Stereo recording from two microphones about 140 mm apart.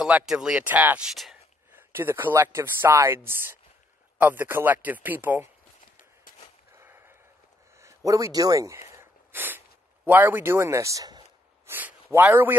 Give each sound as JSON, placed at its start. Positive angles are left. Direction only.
{"t": 0.0, "sound": "speech", "side_deg": -5}
{"t": 1.7, "sound": "speech", "side_deg": -15}
{"t": 6.8, "sound": "a sound", "side_deg": -15}
{"t": 10.0, "sound": "speech", "side_deg": -15}
{"t": 11.6, "sound": "speech", "side_deg": -15}